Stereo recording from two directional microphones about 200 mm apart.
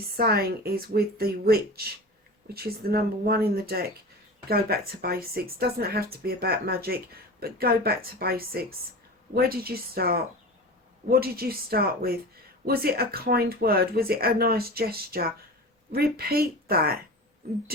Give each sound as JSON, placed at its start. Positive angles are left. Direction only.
{"t": 0.2, "sound": "speech", "side_deg": -50}